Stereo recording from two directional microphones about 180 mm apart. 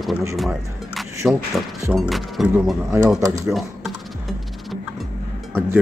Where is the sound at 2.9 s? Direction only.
15° right (ahead or behind).